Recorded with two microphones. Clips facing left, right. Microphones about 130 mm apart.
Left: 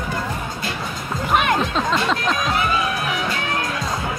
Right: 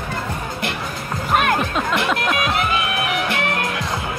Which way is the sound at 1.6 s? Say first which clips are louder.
Even; 10° right (ahead or behind).